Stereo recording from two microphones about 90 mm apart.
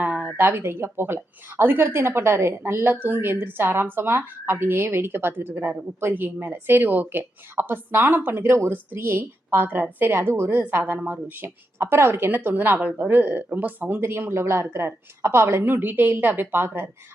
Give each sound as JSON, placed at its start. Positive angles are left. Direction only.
{"t": 0.0, "sound": "speech", "side_deg": -20}